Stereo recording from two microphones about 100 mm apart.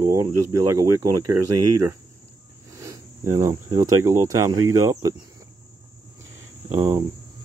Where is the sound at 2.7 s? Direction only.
35° right (ahead or behind).